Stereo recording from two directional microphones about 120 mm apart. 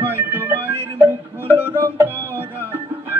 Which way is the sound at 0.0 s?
15° right (ahead or behind).